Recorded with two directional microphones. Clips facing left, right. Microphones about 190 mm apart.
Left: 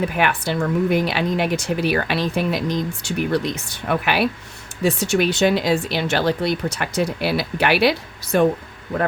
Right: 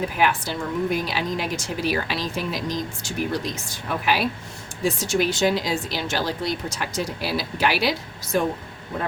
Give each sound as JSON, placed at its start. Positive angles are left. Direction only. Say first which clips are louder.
{"t": 0.2, "sound": "speech", "louder": "even", "side_deg": 65}